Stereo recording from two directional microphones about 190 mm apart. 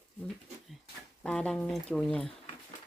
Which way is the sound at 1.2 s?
5° left (ahead or behind).